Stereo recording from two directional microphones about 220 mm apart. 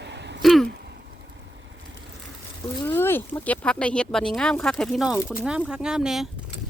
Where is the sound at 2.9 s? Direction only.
10° left (ahead or behind).